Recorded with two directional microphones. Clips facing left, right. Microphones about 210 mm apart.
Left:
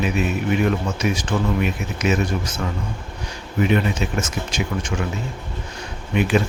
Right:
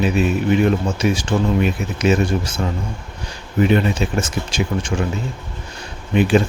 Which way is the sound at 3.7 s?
30° right (ahead or behind).